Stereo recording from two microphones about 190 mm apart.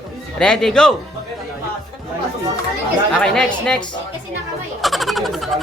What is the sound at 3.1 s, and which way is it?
Speech, 5° left (ahead or behind).